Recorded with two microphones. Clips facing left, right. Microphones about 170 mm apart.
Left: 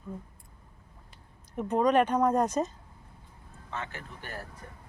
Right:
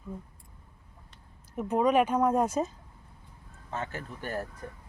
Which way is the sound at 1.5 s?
5° right (ahead or behind).